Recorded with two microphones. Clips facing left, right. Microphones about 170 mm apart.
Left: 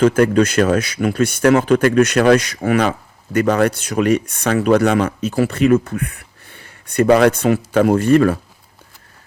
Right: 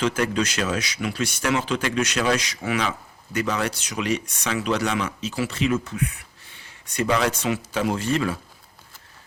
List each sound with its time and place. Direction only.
0.0 s speech: 55° left (ahead or behind)